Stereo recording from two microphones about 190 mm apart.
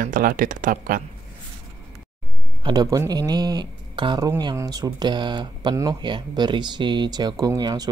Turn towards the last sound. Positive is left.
turn(degrees=-20)  # may be behind; listen again after turning